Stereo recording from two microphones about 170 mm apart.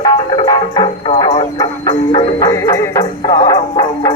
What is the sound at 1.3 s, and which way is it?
Music, 20° left (ahead or behind).